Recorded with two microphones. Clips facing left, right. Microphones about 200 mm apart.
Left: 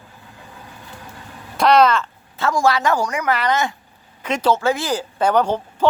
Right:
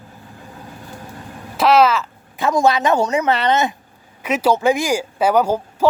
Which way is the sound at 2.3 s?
20° right (ahead or behind).